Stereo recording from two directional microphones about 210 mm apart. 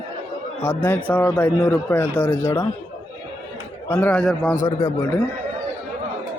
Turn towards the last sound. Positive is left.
turn(degrees=15)  # may be behind; listen again after turning